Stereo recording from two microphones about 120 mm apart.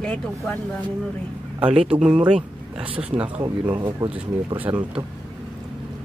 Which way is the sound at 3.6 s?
40° right (ahead or behind).